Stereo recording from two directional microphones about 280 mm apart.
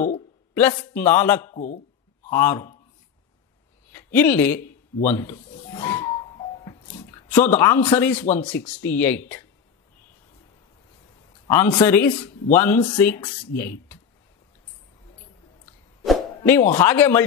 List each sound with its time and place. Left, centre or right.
0.6 s speech: centre
1.5 s speech: left
2.3 s speech: centre
3.9 s speech: centre
5.3 s a sound: centre
7.4 s speech: centre
8.2 s speech: left
8.5 s speech: centre
11.4 s speech: centre
16.1 s a sound: centre
16.7 s speech: centre